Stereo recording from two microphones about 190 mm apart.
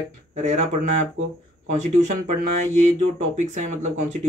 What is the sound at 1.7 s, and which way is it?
Speech, 40° right (ahead or behind).